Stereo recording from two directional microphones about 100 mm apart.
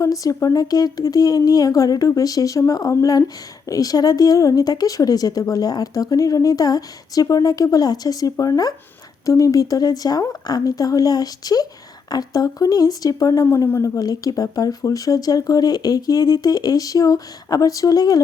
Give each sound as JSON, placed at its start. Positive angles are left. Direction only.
{"t": 0.0, "sound": "speech", "side_deg": 35}